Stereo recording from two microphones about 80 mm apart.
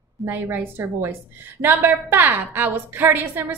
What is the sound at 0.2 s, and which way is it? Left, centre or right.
A woman's voice, right.